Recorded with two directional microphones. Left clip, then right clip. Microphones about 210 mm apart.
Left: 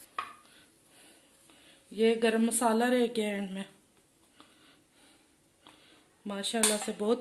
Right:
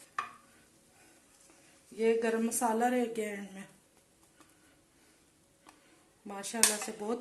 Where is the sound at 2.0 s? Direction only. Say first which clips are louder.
Left 3 dB; 45° left (ahead or behind).